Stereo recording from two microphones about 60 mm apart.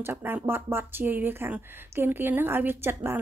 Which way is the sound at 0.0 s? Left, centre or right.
Right.